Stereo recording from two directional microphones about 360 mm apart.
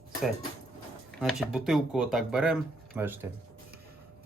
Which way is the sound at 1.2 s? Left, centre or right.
Centre.